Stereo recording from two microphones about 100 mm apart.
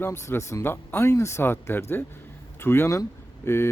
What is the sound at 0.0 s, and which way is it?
Speech, 25° left (ahead or behind).